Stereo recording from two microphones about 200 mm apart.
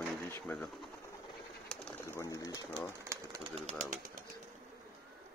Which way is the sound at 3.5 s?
35° right (ahead or behind).